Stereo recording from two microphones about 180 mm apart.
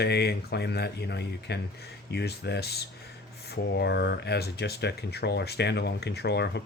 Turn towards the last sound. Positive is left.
turn(degrees=65)  # may be behind; listen again after turning